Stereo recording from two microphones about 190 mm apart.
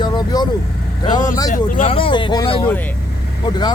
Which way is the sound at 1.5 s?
45° left (ahead or behind).